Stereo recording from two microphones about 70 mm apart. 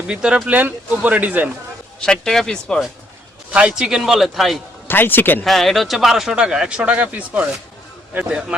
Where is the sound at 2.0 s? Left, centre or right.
Centre.